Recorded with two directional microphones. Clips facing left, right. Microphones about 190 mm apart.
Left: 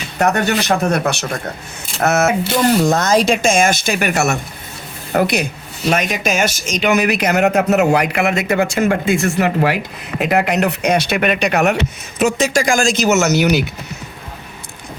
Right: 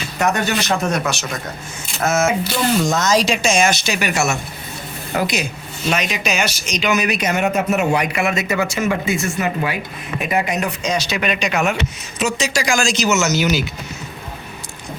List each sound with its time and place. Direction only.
0.2 s speech: 60° left (ahead or behind)
9.4 s speech: 70° left (ahead or behind)